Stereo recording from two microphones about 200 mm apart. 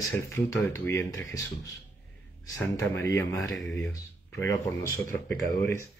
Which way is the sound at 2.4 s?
15° left (ahead or behind).